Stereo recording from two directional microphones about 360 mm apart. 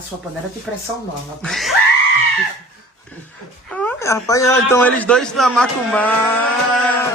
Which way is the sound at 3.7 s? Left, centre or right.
Centre.